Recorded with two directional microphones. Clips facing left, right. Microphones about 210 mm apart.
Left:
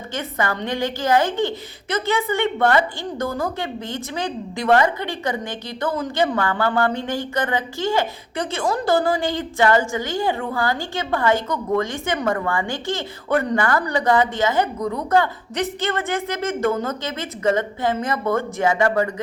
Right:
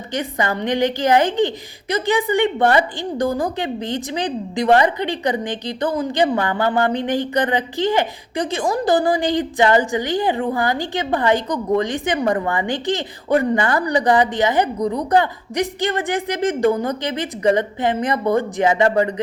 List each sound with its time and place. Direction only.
0.1 s a woman's voice: 15° right (ahead or behind)